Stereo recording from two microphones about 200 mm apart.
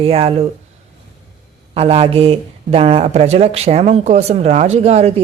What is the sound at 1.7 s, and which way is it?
Speech, 30° right (ahead or behind).